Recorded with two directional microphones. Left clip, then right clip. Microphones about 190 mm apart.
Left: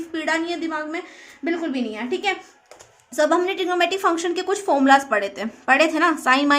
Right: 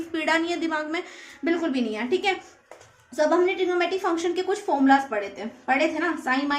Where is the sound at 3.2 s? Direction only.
30° left (ahead or behind).